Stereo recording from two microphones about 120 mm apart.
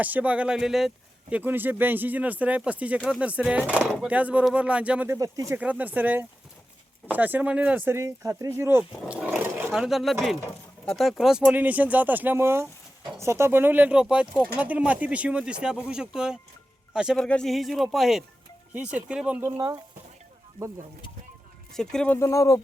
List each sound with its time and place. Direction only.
0.0 s speech: 15° right (ahead or behind)
5.0 s speech: 25° right (ahead or behind)
5.5 s speech: 10° right (ahead or behind)
9.0 s roaring cats: 10° right (ahead or behind)
9.7 s a man's voice: 5° right (ahead or behind)
17.2 s speech: 5° left (ahead or behind)
18.7 s speech: 10° right (ahead or behind)
21.7 s speech: 5° left (ahead or behind)
22.2 s speech: 25° left (ahead or behind)